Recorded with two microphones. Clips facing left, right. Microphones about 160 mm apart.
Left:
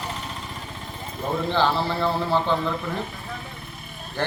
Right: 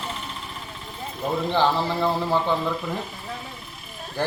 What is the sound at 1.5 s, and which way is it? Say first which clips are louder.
Speech: right 1 dB; 15° right (ahead or behind).